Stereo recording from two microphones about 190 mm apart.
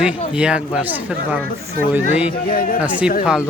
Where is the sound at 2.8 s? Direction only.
5° right (ahead or behind).